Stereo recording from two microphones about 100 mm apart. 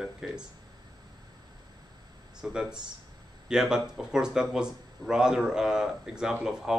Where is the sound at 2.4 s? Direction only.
10° right (ahead or behind).